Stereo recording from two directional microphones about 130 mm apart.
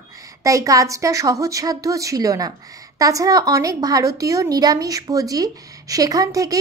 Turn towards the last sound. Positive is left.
turn(degrees=-25)  # may be behind; listen again after turning